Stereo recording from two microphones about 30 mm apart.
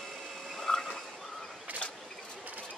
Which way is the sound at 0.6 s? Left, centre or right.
Centre.